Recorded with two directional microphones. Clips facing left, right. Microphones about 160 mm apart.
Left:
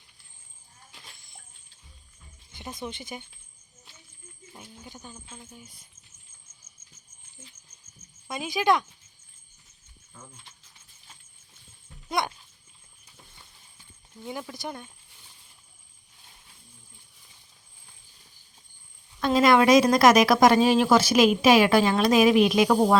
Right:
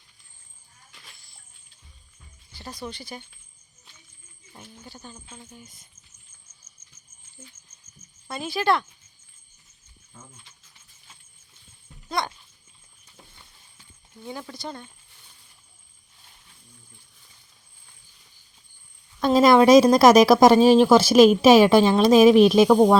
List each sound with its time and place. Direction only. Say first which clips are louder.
2.5 s speech: even; 20° left (ahead or behind)
4.5 s a sound: right 1 dB; 10° left (ahead or behind)
5.3 s speech: right 1 dB; 5° left (ahead or behind)
8.3 s speech: even; 15° left (ahead or behind)
12.0 s speech: even; 20° left (ahead or behind)
14.3 s speech: even; 15° left (ahead or behind)
19.2 s speech: right 4 dB; 35° right (ahead or behind)